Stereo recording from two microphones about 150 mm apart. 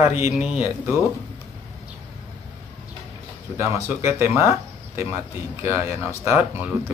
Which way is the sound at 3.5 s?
20° right (ahead or behind).